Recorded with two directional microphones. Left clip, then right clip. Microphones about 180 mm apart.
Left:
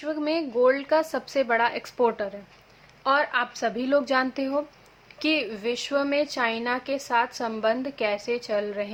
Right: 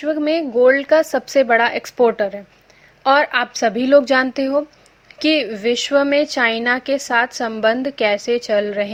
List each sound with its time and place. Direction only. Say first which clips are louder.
0.0 s speech: right 9 dB; 25° right (ahead or behind)